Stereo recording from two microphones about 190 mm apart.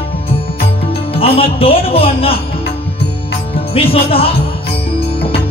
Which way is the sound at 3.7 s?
30° left (ahead or behind).